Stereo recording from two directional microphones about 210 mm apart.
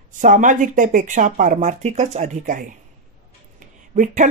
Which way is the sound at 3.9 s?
40° right (ahead or behind).